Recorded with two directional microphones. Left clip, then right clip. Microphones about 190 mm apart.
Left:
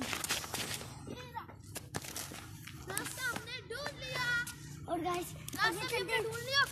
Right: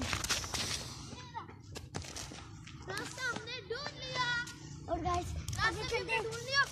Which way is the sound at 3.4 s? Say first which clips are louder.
Right 1 dB; 60° left (ahead or behind).